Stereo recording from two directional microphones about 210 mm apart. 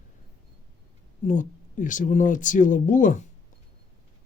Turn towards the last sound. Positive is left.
turn(degrees=35)  # may be behind; listen again after turning